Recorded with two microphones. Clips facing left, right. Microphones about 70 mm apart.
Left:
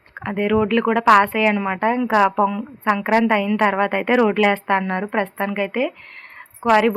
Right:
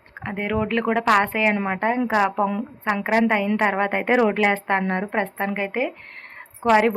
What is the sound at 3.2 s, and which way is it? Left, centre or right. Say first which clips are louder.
A woman's voice: left 3 dB; centre.